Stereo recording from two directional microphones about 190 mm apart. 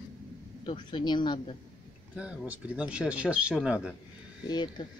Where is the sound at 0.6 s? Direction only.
25° left (ahead or behind).